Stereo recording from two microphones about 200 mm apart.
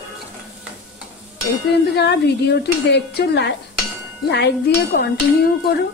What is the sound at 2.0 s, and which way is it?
Speech, 55° left (ahead or behind).